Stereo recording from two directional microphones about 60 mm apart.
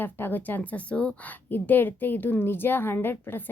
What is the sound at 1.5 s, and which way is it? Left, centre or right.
A woman's voice, left.